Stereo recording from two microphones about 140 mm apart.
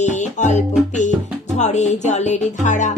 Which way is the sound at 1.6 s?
55° left (ahead or behind).